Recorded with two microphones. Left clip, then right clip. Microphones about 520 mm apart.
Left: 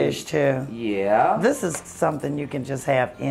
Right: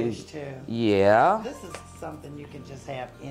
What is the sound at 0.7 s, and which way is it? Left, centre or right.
Speech, right.